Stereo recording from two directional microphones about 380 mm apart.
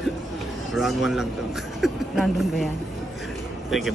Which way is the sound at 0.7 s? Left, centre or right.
Centre.